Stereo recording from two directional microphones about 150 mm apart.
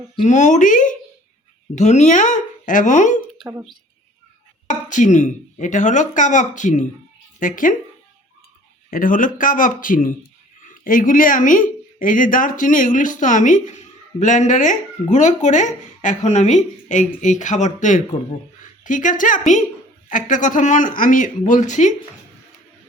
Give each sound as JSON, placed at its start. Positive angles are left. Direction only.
{"t": 0.3, "sound": "speech", "side_deg": 55}
{"t": 3.4, "sound": "speech", "side_deg": -25}
{"t": 4.7, "sound": "speech", "side_deg": 55}
{"t": 8.9, "sound": "speech", "side_deg": 65}